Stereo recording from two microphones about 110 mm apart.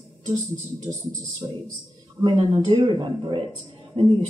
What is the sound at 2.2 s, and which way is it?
Speech, 45° right (ahead or behind).